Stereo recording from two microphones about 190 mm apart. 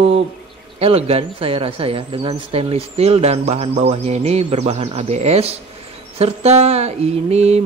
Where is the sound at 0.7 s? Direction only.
30° right (ahead or behind).